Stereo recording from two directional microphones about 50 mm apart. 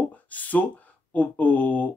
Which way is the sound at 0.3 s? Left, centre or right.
Left.